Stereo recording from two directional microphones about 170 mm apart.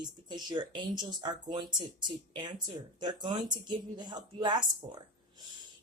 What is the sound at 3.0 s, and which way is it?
A woman's voice, 25° right (ahead or behind).